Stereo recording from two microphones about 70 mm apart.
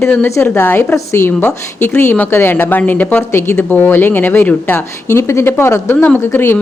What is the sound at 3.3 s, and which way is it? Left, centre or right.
Speech, left.